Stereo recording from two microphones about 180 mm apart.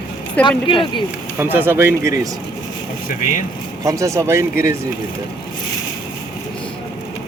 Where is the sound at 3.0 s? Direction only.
45° left (ahead or behind).